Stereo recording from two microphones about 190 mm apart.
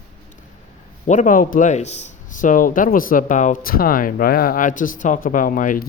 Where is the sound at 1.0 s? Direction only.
40° left (ahead or behind).